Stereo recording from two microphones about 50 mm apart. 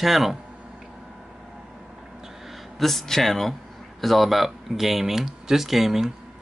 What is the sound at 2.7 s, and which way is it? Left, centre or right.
Speech, centre.